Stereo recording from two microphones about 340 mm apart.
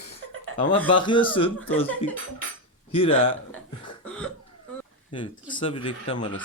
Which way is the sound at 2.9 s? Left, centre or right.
Centre.